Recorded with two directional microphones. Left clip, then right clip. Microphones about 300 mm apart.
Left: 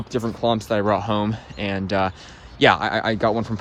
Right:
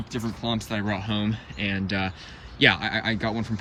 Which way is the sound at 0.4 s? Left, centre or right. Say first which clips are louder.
Left 10 dB; centre.